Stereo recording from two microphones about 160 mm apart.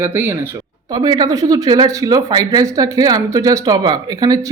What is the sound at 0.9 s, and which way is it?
Speech, 25° right (ahead or behind).